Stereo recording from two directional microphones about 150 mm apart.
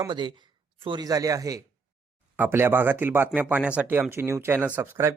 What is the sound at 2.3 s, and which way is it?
Speech, 15° right (ahead or behind).